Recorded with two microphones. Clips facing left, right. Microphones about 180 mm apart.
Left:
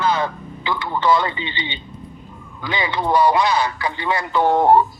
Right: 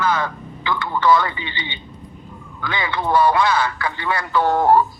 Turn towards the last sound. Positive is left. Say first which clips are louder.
# left 1 dB
turn(degrees=25)  # may be behind; listen again after turning